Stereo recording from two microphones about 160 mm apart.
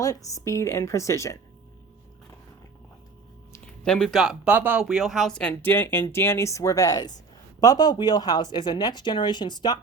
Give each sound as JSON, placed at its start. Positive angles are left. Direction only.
{"t": 0.0, "sound": "speech", "side_deg": 20}
{"t": 3.8, "sound": "speech", "side_deg": 5}